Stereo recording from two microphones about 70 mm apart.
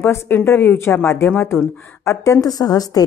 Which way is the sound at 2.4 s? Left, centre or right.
Left.